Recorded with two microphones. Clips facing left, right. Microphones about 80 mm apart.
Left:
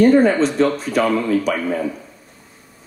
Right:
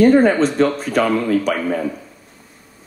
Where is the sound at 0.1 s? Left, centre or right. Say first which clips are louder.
Right 1 dB; right.